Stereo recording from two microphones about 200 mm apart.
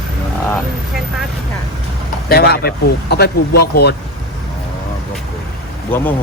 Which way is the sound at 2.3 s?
50° left (ahead or behind).